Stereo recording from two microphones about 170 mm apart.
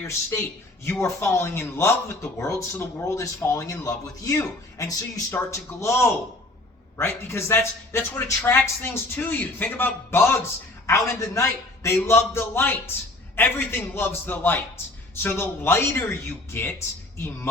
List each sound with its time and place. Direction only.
0.1 s speech: 15° left (ahead or behind)